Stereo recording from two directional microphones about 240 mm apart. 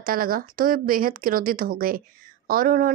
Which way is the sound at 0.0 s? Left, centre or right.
Right.